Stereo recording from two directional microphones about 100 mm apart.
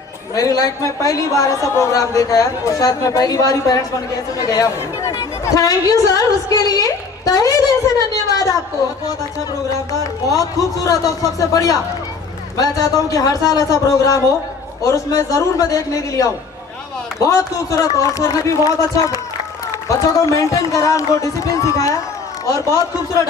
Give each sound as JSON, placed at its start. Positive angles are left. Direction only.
{"t": 0.3, "sound": "a man's voice", "side_deg": 35}
{"t": 8.3, "sound": "a sound", "side_deg": 35}
{"t": 10.3, "sound": "a man's voice", "side_deg": 35}